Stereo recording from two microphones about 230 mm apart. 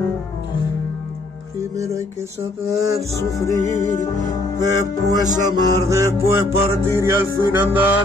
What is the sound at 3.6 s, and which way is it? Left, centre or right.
Music, left.